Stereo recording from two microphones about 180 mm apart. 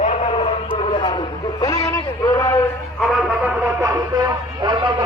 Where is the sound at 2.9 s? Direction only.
Centre (ahead or behind).